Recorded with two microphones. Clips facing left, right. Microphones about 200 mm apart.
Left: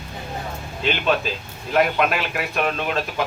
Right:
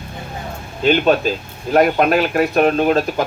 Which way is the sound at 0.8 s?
40° right (ahead or behind).